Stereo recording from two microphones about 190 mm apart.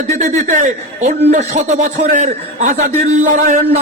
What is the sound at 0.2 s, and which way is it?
A man's voice, 40° right (ahead or behind).